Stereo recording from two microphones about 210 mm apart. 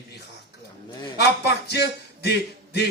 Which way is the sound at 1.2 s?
50° left (ahead or behind).